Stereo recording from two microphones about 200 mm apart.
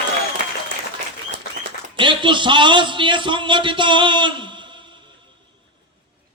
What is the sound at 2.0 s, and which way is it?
A man's voice, 25° right (ahead or behind).